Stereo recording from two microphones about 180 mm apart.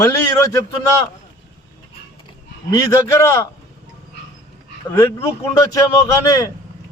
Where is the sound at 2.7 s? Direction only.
15° left (ahead or behind).